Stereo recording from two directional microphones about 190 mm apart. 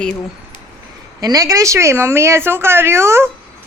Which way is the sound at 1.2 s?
20° right (ahead or behind).